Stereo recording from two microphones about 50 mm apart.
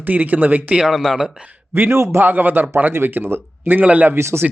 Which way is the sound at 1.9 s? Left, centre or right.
Right.